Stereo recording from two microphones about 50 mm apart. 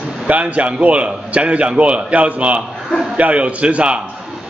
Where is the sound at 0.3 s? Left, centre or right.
Right.